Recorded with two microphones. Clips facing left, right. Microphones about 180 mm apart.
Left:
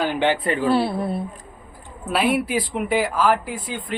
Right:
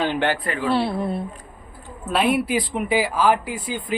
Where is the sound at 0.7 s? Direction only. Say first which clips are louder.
Right 1 dB; centre (ahead or behind).